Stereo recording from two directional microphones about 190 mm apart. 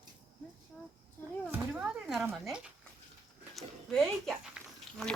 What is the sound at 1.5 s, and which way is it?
Speech, 10° right (ahead or behind).